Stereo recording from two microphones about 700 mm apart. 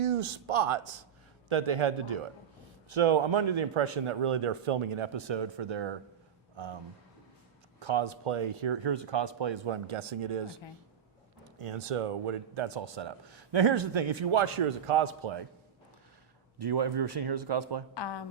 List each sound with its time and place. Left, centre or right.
0.0 s speech: right
7.8 s speech: right
11.6 s speech: right
16.6 s speech: right
17.9 s speech: left